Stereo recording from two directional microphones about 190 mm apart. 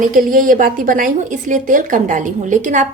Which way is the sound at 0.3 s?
45° right (ahead or behind).